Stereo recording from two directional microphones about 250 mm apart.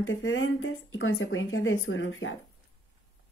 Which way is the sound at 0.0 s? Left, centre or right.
Left.